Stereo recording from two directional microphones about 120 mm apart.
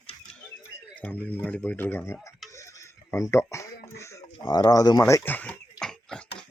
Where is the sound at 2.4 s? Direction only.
25° left (ahead or behind).